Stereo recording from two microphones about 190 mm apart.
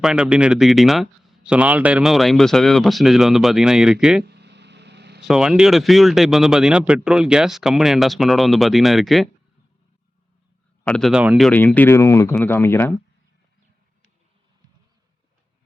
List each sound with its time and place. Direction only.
0.0 s speech: 5° right (ahead or behind)
4.2 s a sound: 60° right (ahead or behind)
5.3 s speech: 5° right (ahead or behind)
10.8 s speech: centre (ahead or behind)